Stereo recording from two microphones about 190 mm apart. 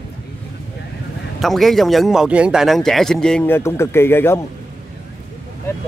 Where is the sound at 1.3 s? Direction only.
Centre (ahead or behind).